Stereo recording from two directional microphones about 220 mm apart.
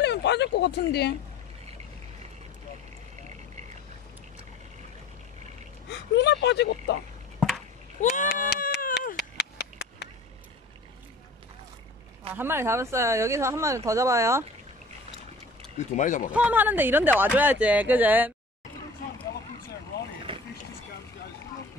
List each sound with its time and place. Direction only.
0.0 s speech: 50° left (ahead or behind)
5.9 s speech: 50° left (ahead or behind)
8.0 s bleat: 35° left (ahead or behind)
12.4 s speech: 10° right (ahead or behind)
16.0 s speech: 35° left (ahead or behind)
16.3 s speech: 5° right (ahead or behind)
20.3 s vehicle: 25° right (ahead or behind)